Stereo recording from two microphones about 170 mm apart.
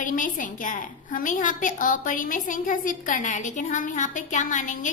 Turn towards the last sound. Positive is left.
turn(degrees=50)  # may be behind; listen again after turning